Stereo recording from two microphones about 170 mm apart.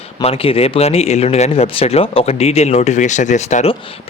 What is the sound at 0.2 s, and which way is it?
Speech, 35° left (ahead or behind).